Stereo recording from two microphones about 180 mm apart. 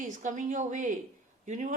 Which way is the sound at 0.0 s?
45° right (ahead or behind).